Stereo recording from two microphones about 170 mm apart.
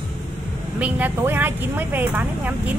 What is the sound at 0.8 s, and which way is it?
Speech, 10° right (ahead or behind).